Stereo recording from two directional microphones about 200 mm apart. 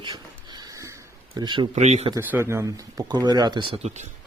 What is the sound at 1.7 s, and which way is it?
Speech, 35° right (ahead or behind).